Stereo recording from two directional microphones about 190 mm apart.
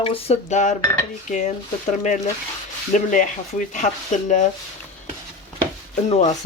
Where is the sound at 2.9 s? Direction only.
45° left (ahead or behind).